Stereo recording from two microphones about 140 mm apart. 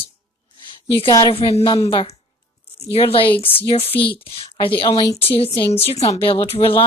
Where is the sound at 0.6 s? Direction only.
35° left (ahead or behind).